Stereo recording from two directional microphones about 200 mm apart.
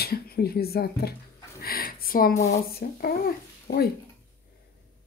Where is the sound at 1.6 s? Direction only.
50° left (ahead or behind).